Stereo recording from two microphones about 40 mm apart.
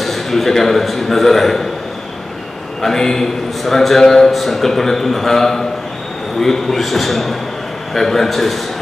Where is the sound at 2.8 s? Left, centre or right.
Centre.